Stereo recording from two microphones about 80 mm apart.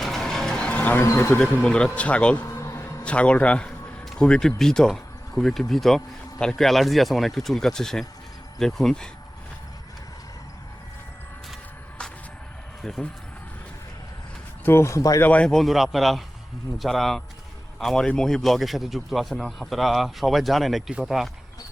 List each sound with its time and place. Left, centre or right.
0.0 s a sound: centre; by 1.0 s left
1.0 s speech: left
1.4 s speech: centre
2.5 s a sound: left
3.0 s a man's voice: centre
12.8 s speech: centre
14.6 s speech: left
15.2 s speech: centre
15.4 s a man's voice: centre